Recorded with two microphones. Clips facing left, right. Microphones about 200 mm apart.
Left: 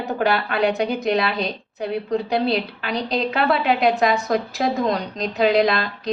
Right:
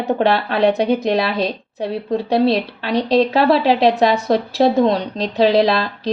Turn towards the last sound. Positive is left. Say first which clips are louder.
# right 3 dB
turn(degrees=-30)  # may be behind; listen again after turning